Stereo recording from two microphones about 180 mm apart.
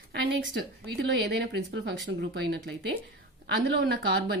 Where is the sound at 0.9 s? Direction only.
65° right (ahead or behind).